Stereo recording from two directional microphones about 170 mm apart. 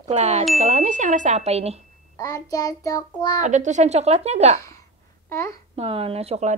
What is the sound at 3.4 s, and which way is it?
Speech, 45° right (ahead or behind).